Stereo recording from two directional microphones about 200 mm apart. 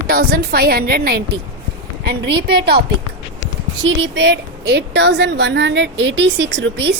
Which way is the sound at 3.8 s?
65° right (ahead or behind).